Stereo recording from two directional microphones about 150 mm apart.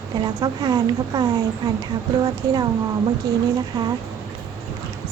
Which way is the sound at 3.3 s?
25° right (ahead or behind).